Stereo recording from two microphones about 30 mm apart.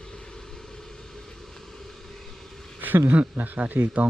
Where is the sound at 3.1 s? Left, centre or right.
Right.